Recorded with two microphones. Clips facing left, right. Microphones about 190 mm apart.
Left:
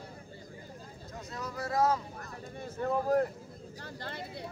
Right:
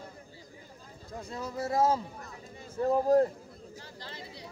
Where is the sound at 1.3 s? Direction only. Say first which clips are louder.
Right 3 dB; 25° right (ahead or behind).